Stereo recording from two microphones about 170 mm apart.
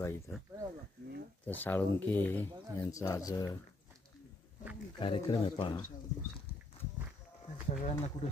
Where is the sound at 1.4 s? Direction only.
10° left (ahead or behind).